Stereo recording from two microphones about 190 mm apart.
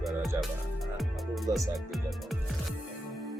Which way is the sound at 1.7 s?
Centre (ahead or behind).